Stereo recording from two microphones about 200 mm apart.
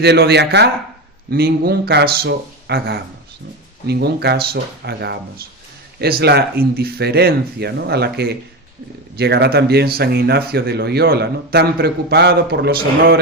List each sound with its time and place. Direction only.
0.0 s speech: 55° right (ahead or behind)